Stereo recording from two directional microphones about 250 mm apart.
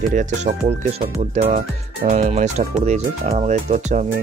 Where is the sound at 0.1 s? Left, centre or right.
Right.